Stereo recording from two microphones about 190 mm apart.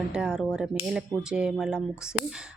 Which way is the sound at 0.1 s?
5° right (ahead or behind).